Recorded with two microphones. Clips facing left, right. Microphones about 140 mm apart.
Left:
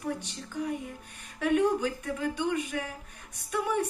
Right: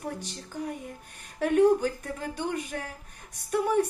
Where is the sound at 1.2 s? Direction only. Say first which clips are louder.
Right 4 dB; 45° right (ahead or behind).